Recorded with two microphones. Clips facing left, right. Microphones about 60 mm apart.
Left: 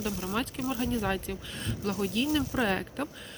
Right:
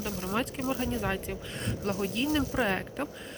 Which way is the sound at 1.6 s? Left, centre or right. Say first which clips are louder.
Even; right.